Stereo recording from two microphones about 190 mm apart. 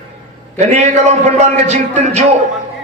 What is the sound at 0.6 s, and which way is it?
A man's voice, 35° right (ahead or behind).